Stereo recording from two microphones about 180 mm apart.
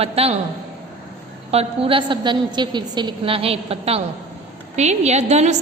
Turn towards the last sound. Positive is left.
turn(degrees=-40)  # may be behind; listen again after turning